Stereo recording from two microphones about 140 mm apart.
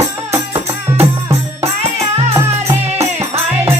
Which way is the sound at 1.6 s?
50° right (ahead or behind).